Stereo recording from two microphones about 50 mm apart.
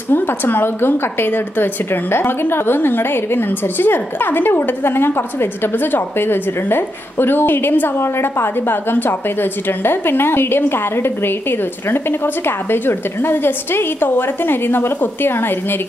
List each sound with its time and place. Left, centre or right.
0.1 s a woman's voice: left
8.0 s a woman's voice: left